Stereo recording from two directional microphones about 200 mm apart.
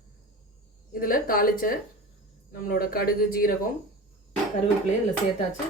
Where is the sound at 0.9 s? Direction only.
45° left (ahead or behind).